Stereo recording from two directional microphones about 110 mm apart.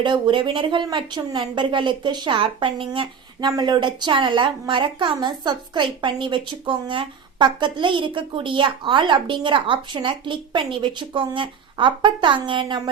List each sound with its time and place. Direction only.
0.0 s a woman's voice: 45° right (ahead or behind)
3.5 s a woman's voice: 40° right (ahead or behind)